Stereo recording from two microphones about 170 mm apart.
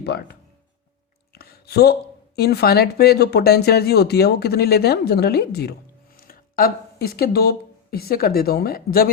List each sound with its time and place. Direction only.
0.0 s speech: 70° left (ahead or behind)
6.1 s speech: 60° left (ahead or behind)